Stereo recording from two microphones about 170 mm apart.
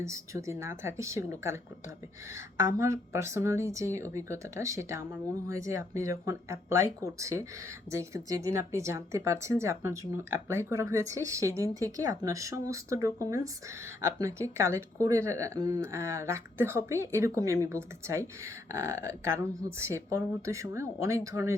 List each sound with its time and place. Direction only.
0.0 s speech: 15° right (ahead or behind)